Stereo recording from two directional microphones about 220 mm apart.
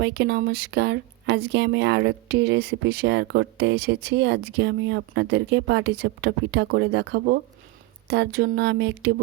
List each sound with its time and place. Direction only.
0.0 s speech: 50° right (ahead or behind)